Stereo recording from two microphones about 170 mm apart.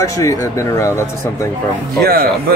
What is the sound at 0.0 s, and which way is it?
Speech, 20° left (ahead or behind).